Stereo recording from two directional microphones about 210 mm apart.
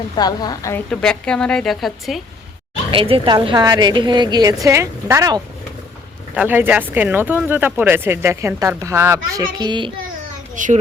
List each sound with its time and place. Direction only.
0.2 s a woman's voice: 20° left (ahead or behind)
0.9 s speech: 5° left (ahead or behind)
2.9 s a woman's voice: 25° right (ahead or behind)
10.5 s a child's voice: 35° right (ahead or behind)